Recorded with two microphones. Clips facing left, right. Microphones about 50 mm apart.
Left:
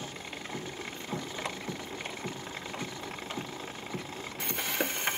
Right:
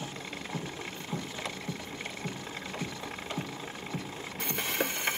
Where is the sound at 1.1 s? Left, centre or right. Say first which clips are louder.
Even; left.